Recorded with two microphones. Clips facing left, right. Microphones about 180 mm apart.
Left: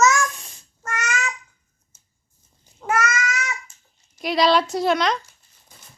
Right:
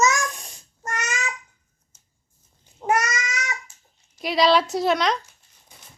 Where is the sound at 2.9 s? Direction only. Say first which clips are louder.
Even; 15° right (ahead or behind).